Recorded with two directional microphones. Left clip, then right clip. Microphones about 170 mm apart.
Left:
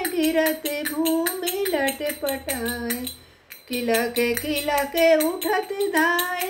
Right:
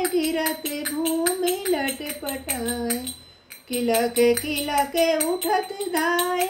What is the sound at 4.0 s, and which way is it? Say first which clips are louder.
Music: right 3 dB; 20° left (ahead or behind).